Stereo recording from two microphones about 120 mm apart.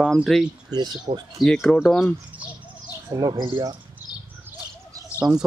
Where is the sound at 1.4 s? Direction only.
5° left (ahead or behind).